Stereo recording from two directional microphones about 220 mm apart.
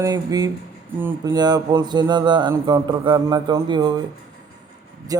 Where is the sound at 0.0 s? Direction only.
15° right (ahead or behind).